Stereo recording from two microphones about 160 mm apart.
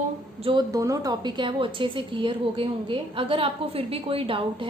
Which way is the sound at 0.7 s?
20° right (ahead or behind).